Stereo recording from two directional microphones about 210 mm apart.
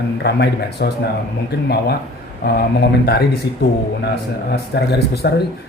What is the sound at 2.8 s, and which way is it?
Speech, 50° left (ahead or behind).